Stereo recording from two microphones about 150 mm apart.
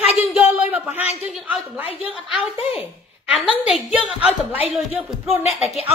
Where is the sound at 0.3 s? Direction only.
10° right (ahead or behind).